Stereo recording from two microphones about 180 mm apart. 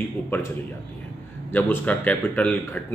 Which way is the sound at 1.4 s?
10° left (ahead or behind).